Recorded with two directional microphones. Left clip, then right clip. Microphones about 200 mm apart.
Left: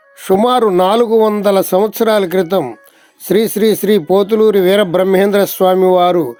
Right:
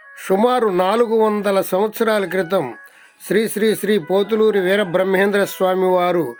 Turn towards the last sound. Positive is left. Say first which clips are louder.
# left 6 dB
turn(degrees=15)  # may be behind; listen again after turning